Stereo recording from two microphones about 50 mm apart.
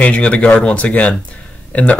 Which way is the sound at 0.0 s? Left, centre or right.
Left.